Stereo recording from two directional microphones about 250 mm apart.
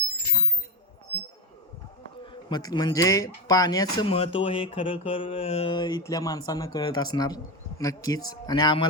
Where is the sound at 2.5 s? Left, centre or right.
Centre.